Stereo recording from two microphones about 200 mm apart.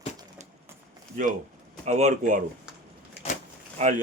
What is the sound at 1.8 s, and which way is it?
Speech, 35° right (ahead or behind).